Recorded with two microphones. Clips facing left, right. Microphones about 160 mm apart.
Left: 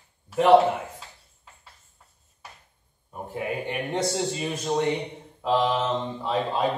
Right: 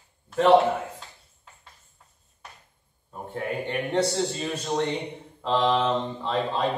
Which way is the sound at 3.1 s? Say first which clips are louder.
Even; 10° left (ahead or behind).